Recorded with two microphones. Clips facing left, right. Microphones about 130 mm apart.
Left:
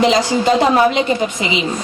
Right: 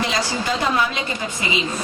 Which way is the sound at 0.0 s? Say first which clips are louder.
Left 10 dB; 20° left (ahead or behind).